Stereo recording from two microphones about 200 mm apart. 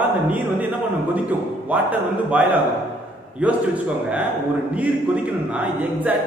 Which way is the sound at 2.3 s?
10° right (ahead or behind).